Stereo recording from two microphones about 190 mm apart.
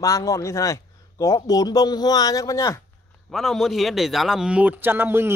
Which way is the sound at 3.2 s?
Centre (ahead or behind).